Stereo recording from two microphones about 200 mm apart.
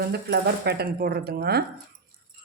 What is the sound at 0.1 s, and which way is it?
Speech, 55° right (ahead or behind).